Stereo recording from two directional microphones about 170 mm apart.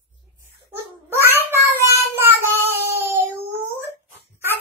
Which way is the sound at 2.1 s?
15° right (ahead or behind).